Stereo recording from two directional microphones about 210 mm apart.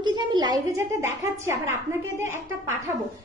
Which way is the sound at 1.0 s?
10° right (ahead or behind).